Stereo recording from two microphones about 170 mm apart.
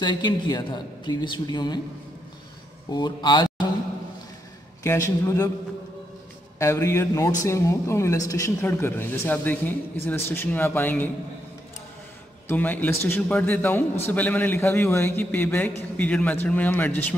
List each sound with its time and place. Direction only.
0.0 s a woman's voice: 25° left (ahead or behind)
2.9 s speech: 25° left (ahead or behind)
4.8 s a man's voice: 15° left (ahead or behind)
6.6 s a man's voice: 15° left (ahead or behind)
12.4 s a man's voice: 10° left (ahead or behind)